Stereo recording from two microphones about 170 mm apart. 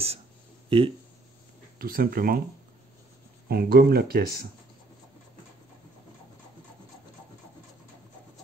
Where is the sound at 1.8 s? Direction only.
60° right (ahead or behind).